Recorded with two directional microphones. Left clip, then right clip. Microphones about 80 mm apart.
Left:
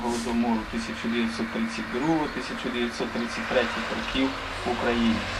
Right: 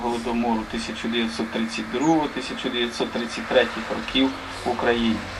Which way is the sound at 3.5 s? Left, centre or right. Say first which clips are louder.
Right 5 dB; centre.